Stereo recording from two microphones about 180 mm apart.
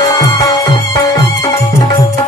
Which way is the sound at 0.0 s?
20° left (ahead or behind).